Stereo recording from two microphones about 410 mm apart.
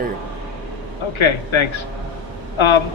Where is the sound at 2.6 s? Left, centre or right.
Left.